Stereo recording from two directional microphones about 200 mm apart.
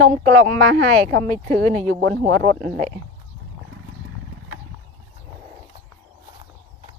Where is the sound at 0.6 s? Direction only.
60° right (ahead or behind).